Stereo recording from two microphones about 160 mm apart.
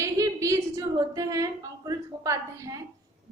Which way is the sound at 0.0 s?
20° right (ahead or behind).